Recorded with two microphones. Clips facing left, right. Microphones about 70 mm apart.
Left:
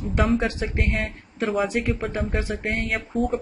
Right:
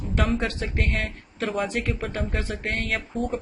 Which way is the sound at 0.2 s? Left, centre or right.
Centre.